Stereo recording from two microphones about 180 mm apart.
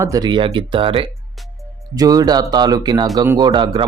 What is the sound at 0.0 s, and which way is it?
Speech, 20° right (ahead or behind).